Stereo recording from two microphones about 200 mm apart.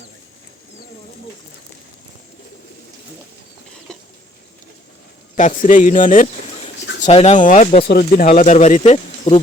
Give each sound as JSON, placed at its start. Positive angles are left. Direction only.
{"t": 5.4, "sound": "speech", "side_deg": 40}